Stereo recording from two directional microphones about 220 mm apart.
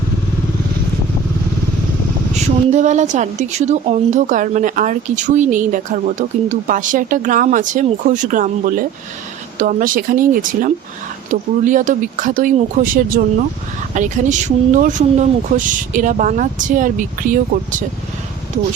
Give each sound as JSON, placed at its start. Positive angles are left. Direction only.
{"t": 2.3, "sound": "a woman's voice", "side_deg": -35}